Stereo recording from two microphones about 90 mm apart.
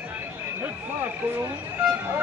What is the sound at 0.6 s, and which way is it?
Speech, 20° right (ahead or behind).